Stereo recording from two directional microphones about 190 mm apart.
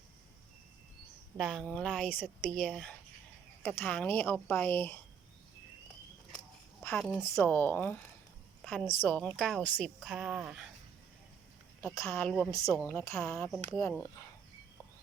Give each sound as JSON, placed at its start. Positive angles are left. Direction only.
{"t": 1.4, "sound": "a woman's voice", "side_deg": 0}
{"t": 6.8, "sound": "a woman's voice", "side_deg": 5}
{"t": 7.2, "sound": "a woman's voice", "side_deg": 15}
{"t": 12.0, "sound": "a woman's voice", "side_deg": 5}
{"t": 12.5, "sound": "speech", "side_deg": 15}